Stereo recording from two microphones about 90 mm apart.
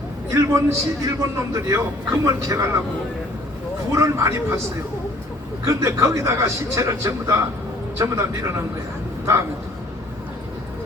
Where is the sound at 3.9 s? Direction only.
35° right (ahead or behind).